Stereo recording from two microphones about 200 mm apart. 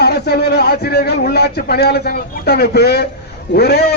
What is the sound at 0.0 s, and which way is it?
A man's voice, 55° left (ahead or behind).